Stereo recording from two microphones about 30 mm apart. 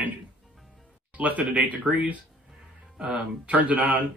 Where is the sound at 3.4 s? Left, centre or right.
Right.